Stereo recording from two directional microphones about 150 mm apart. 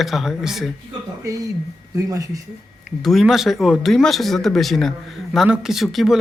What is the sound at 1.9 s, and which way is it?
Speech, 20° right (ahead or behind).